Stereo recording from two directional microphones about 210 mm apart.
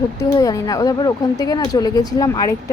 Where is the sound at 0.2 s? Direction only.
15° left (ahead or behind).